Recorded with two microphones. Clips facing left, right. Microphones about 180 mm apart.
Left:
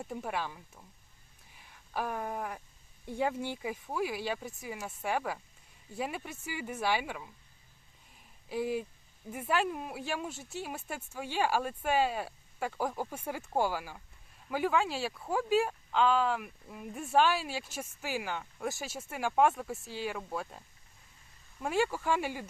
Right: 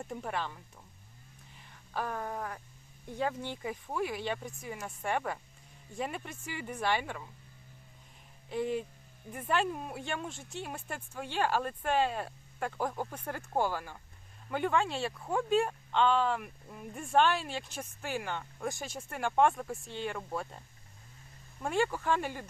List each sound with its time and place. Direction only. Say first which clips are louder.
0.0 s speech: even; 5° left (ahead or behind)
8.4 s speech: even; 5° left (ahead or behind)
21.6 s speech: even; 5° left (ahead or behind)